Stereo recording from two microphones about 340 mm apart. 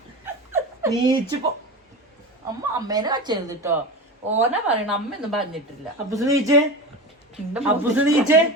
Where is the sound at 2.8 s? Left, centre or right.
Centre.